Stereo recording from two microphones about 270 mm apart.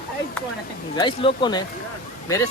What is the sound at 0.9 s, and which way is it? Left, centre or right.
Speech, centre.